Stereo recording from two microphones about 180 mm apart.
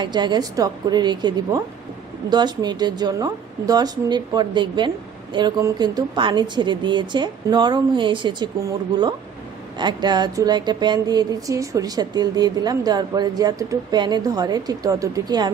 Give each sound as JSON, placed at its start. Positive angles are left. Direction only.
{"t": 0.0, "sound": "speech", "side_deg": -25}